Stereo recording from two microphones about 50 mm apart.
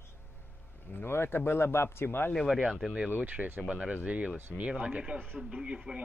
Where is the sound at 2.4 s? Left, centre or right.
Centre.